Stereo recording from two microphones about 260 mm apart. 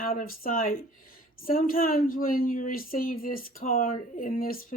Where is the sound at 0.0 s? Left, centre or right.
Left.